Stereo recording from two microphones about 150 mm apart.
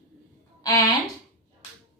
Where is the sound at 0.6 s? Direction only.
20° left (ahead or behind).